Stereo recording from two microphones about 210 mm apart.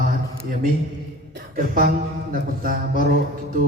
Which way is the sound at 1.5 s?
40° right (ahead or behind).